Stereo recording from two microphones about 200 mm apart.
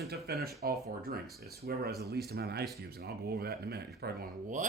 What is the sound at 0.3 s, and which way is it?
Speech, 50° right (ahead or behind).